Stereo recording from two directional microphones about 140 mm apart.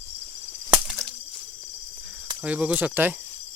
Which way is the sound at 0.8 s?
Centre (ahead or behind).